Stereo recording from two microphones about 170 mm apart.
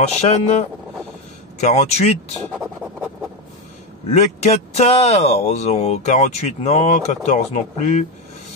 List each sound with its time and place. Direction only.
0.0 s speech: 40° left (ahead or behind)
2.5 s scratch: 5° right (ahead or behind)
4.2 s speech: 40° left (ahead or behind)